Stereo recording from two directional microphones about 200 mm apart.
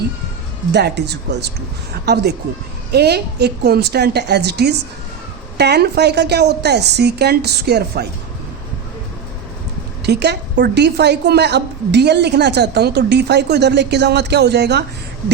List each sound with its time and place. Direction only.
0.7 s a woman's voice: 60° right (ahead or behind)
2.9 s a woman's voice: 55° right (ahead or behind)
10.0 s a woman's voice: 55° right (ahead or behind)